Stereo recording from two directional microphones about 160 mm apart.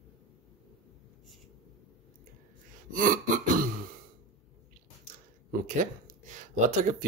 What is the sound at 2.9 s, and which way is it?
Speech, 60° right (ahead or behind).